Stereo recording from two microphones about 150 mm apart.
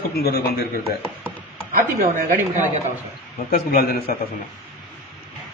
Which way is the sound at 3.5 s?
80° left.